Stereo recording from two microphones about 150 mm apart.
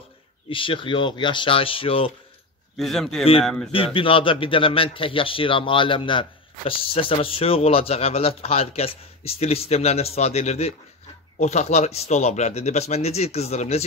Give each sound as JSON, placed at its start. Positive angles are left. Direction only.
{"t": 0.5, "sound": "a man's voice", "side_deg": 35}
{"t": 2.8, "sound": "a man's voice", "side_deg": 0}
{"t": 3.7, "sound": "a man's voice", "side_deg": 35}